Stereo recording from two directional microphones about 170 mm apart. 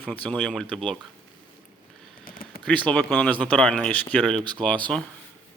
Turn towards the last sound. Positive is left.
turn(degrees=5)  # may be behind; listen again after turning